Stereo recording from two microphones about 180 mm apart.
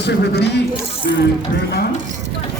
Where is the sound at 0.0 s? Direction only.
70° left (ahead or behind).